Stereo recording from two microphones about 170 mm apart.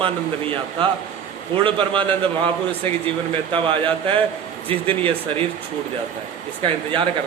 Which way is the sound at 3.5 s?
30° right (ahead or behind).